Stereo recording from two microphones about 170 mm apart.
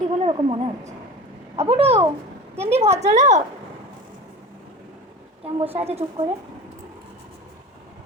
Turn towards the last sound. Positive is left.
turn(degrees=-35)  # may be behind; listen again after turning